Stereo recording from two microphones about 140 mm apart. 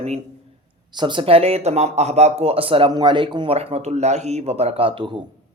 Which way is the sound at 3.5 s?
50° right (ahead or behind).